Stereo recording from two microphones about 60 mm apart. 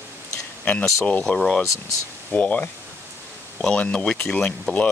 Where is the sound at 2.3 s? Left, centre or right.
Left.